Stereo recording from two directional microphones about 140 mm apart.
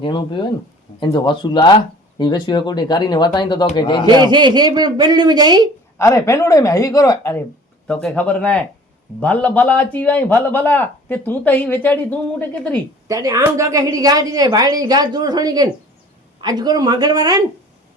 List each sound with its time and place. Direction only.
0.0 s speech: 35° left (ahead or behind)
4.3 s speech: 30° right (ahead or behind)
6.0 s speech: 20° left (ahead or behind)
7.9 s a man's voice: 10° left (ahead or behind)
13.1 s a woman's voice: 25° right (ahead or behind)